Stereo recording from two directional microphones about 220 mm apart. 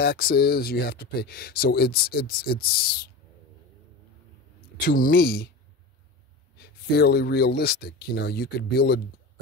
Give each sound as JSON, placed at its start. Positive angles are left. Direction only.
{"t": 0.0, "sound": "speech", "side_deg": 45}
{"t": 4.8, "sound": "speech", "side_deg": 40}
{"t": 6.6, "sound": "speech", "side_deg": 45}